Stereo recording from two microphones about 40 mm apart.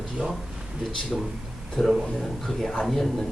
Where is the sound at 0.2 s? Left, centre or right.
Right.